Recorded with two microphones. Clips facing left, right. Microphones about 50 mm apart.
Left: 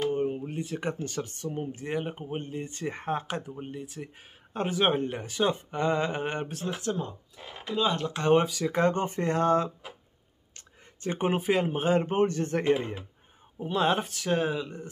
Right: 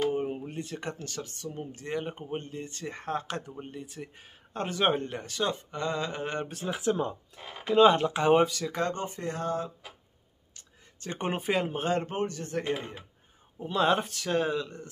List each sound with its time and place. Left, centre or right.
0.0 s a sound: centre
0.5 s speech: centre
6.4 s speech: centre
6.8 s speech: centre
7.7 s speech: right
8.0 s speech: centre
8.6 s speech: left
9.0 s speech: left
11.1 s speech: centre
12.1 s speech: left
12.6 s speech: centre
13.6 s speech: centre